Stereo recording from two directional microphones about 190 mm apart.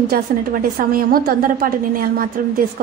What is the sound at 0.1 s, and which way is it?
A woman's voice, 50° right (ahead or behind).